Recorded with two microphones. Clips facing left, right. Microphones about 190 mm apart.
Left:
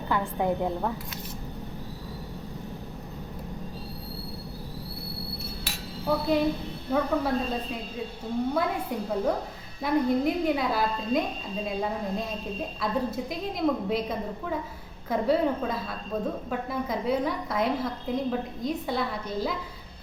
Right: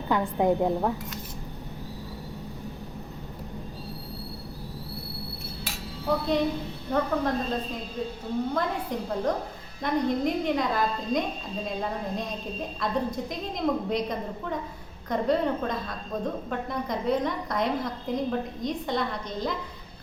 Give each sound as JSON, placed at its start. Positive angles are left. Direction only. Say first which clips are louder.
{"t": 0.1, "sound": "a woman's voice", "louder": "right 3 dB", "side_deg": -20}
{"t": 6.1, "sound": "a woman's voice", "louder": "left 1 dB", "side_deg": 5}